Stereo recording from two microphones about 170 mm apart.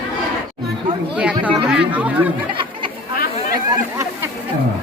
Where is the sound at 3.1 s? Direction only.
60° left (ahead or behind).